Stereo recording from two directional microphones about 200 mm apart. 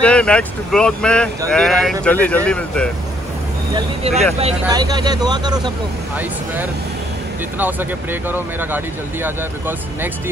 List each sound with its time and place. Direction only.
0.0 s speech: 5° left (ahead or behind)
3.7 s speech: 30° right (ahead or behind)
4.6 s speech: 20° right (ahead or behind)
6.1 s speech: 10° right (ahead or behind)